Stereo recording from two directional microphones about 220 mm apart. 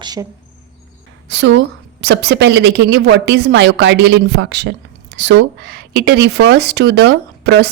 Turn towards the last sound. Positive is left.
turn(degrees=-50)  # may be behind; listen again after turning